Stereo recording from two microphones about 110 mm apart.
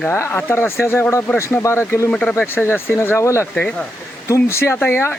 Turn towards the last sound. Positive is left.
turn(degrees=20)  # may be behind; listen again after turning